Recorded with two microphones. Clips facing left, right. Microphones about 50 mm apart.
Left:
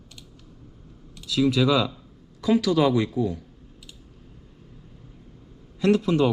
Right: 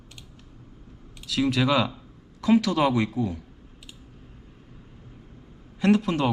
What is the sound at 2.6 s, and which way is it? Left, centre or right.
Speech, right.